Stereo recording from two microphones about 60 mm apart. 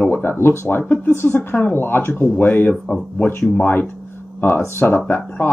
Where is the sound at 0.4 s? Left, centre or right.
Left.